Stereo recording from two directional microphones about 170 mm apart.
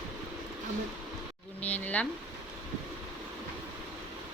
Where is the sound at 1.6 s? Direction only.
10° left (ahead or behind).